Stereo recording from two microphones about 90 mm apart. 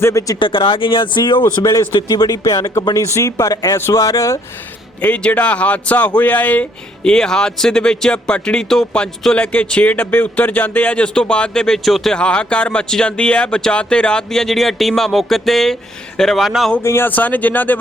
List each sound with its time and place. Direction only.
0.0 s speech: 35° left (ahead or behind)
0.3 s speech: 75° left (ahead or behind)
2.0 s speech: 45° left (ahead or behind)
4.9 s speech: 15° left (ahead or behind); by 16.7 s 5° right (ahead or behind)
16.8 s speech: 25° left (ahead or behind)